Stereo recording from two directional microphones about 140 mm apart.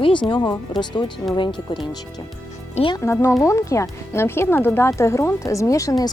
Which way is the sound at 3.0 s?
20° left (ahead or behind).